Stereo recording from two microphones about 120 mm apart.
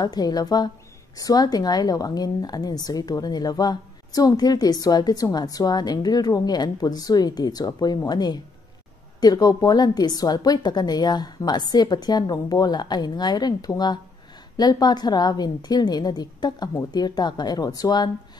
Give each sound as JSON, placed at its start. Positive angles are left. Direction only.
{"t": 0.0, "sound": "speech", "side_deg": 35}